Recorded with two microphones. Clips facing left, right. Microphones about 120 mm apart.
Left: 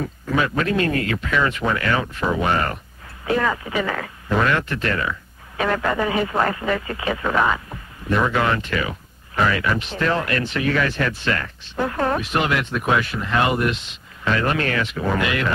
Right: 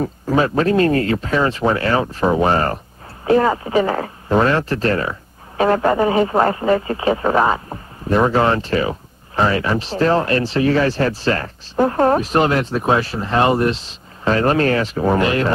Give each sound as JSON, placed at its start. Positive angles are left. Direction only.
{"t": 0.0, "sound": "speech", "side_deg": -35}